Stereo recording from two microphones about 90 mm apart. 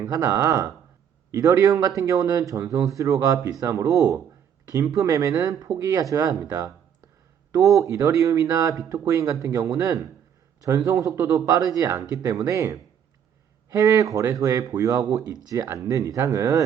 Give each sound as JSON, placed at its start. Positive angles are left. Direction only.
{"t": 0.1, "sound": "speech", "side_deg": -35}
{"t": 7.5, "sound": "speech", "side_deg": -40}